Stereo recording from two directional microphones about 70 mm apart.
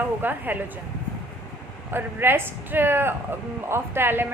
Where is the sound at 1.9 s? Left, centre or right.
Right.